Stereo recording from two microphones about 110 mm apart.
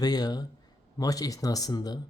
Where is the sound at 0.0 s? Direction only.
35° left (ahead or behind).